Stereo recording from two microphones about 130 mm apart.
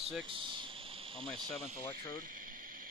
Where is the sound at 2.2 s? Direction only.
90° right.